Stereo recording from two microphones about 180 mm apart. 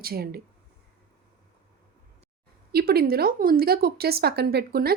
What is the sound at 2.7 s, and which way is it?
Speech, 60° right (ahead or behind).